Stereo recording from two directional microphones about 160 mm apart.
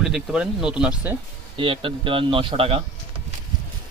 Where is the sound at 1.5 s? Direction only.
35° right (ahead or behind).